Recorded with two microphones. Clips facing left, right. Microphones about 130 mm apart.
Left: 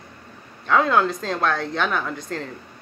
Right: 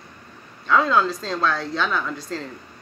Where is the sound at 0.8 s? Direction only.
55° left (ahead or behind).